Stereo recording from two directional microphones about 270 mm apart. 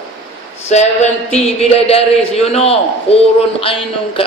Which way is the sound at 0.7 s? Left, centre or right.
Left.